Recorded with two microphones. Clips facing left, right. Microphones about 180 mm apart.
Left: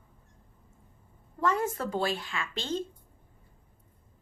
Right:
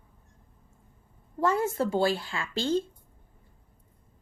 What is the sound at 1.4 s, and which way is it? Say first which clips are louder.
A woman's voice: right 3 dB; 30° right (ahead or behind).